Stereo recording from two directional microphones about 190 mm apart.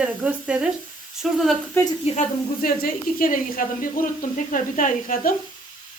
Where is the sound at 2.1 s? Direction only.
50° left (ahead or behind).